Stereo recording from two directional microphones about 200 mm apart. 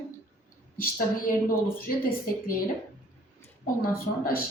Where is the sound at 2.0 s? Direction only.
45° left (ahead or behind).